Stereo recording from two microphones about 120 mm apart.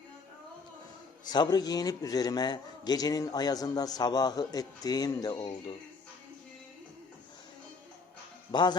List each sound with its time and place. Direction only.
1.3 s a man's voice: 35° left (ahead or behind)
8.5 s a man's voice: 40° left (ahead or behind)